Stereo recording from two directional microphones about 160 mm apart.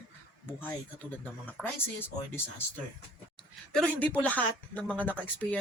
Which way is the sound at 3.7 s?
5° left (ahead or behind).